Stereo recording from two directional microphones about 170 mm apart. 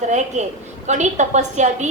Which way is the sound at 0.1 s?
45° right (ahead or behind).